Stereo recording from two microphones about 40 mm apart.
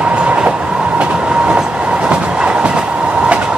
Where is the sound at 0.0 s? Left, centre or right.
Right.